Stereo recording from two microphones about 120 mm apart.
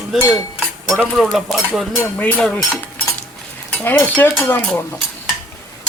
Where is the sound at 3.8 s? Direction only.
15° left (ahead or behind).